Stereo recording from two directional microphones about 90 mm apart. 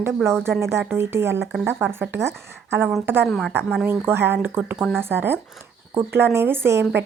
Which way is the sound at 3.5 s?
25° right (ahead or behind).